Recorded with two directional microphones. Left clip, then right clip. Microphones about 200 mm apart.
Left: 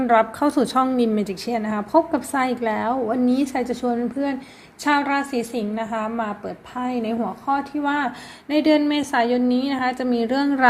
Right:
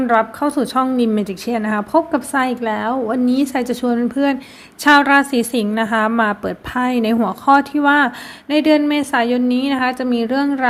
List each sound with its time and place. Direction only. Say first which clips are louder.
0.0 s a woman's voice: right 2 dB; 5° right (ahead or behind)